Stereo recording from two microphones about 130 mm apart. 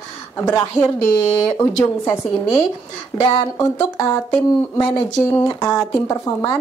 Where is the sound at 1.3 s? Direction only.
25° left (ahead or behind).